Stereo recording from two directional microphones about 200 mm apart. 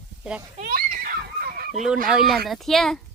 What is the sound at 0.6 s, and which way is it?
Screaming, 45° right (ahead or behind).